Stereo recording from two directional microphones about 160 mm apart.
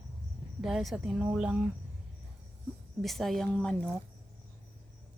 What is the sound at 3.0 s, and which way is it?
Speech, centre (ahead or behind).